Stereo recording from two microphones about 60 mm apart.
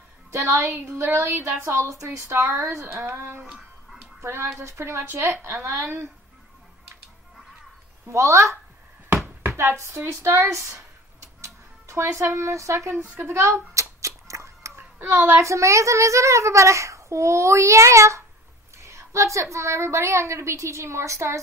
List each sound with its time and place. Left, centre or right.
0.3 s a woman's voice: right
0.8 s a woman's voice: right
8.1 s a child's voice: right
9.1 s a sound: right
9.5 s speech: right
12.9 s a woman's voice: right
13.2 s a sound: right
14.8 s a sound: right
15.4 s a child's voice: right